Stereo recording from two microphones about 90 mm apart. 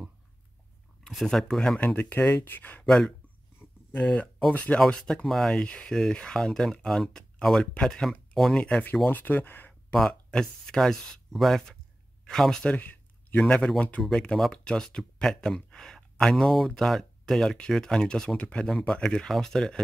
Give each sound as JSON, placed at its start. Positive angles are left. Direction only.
{"t": 1.0, "sound": "speech", "side_deg": 5}
{"t": 2.0, "sound": "speech", "side_deg": 20}
{"t": 2.8, "sound": "speech", "side_deg": 5}
{"t": 4.0, "sound": "speech", "side_deg": 15}
{"t": 9.0, "sound": "speech", "side_deg": 20}
{"t": 9.9, "sound": "speech", "side_deg": 5}
{"t": 12.7, "sound": "speech", "side_deg": 20}